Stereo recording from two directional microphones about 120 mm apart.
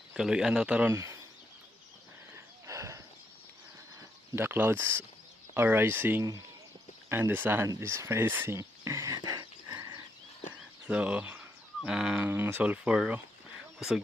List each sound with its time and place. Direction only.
0.1 s speech: 5° right (ahead or behind)
0.9 s speech: 25° right (ahead or behind)
2.3 s a sound: 25° right (ahead or behind)
4.4 s speech: 20° right (ahead or behind)
7.7 s a sound: 20° right (ahead or behind)
10.8 s speech: 10° right (ahead or behind)